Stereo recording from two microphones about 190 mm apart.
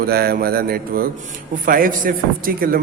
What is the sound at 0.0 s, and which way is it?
A man's voice, 55° right (ahead or behind).